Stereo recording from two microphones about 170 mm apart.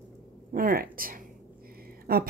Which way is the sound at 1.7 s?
65° right (ahead or behind).